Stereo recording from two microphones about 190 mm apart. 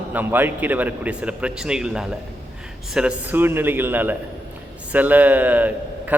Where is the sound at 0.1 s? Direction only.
10° right (ahead or behind).